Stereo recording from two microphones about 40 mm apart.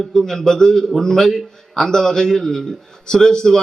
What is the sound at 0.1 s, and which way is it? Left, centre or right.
A man's voice, centre.